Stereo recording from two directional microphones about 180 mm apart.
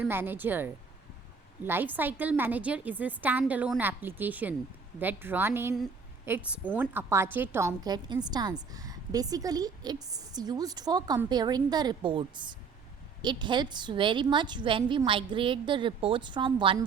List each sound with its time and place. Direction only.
0.0 s a woman's voice: 10° right (ahead or behind)